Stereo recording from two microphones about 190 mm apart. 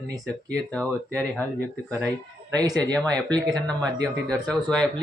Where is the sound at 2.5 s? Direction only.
20° right (ahead or behind).